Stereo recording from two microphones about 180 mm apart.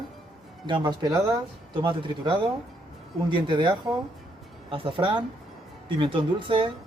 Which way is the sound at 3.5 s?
25° right (ahead or behind).